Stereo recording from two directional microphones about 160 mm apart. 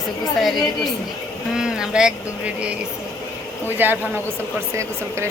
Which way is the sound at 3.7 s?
10° right (ahead or behind).